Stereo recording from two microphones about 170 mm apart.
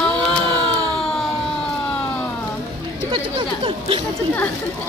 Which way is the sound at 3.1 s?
30° right (ahead or behind).